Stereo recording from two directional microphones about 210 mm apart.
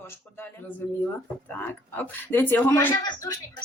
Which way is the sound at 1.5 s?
10° left (ahead or behind).